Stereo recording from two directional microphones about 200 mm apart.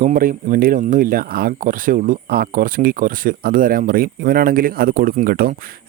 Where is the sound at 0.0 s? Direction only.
45° right (ahead or behind).